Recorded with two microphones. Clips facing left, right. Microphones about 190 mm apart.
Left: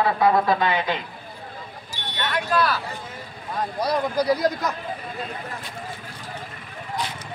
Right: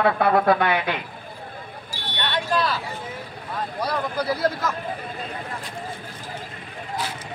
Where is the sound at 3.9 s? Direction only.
15° left (ahead or behind).